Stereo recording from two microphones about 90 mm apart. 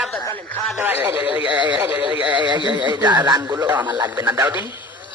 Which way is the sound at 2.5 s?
60° right (ahead or behind).